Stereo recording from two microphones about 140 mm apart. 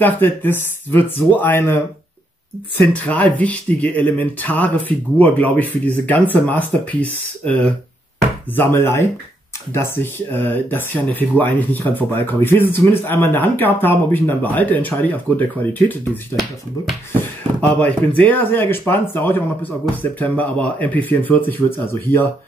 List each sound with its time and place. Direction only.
0.0 s speech: 15° left (ahead or behind)
2.9 s speech: 10° left (ahead or behind)
17.2 s speech: 10° left (ahead or behind)